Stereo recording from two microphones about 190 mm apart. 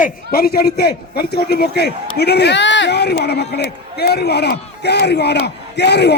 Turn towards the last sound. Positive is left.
turn(degrees=60)  # may be behind; listen again after turning